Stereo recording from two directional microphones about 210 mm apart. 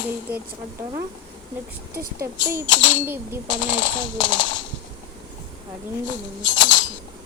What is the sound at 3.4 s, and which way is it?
Speech, 65° left (ahead or behind).